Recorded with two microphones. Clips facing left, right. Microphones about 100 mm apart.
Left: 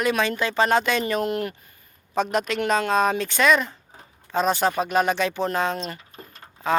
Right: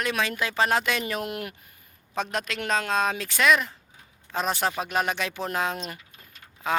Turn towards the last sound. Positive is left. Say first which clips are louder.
# left 7 dB
turn(degrees=40)  # may be behind; listen again after turning